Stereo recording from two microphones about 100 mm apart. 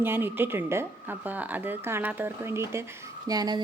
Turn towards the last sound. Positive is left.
turn(degrees=-40)  # may be behind; listen again after turning